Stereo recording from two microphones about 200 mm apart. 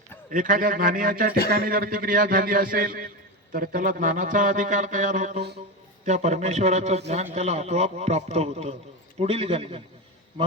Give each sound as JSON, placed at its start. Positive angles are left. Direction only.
{"t": 0.3, "sound": "a man's voice", "side_deg": -40}